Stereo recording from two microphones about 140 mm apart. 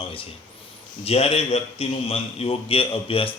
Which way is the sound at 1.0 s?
45° left (ahead or behind).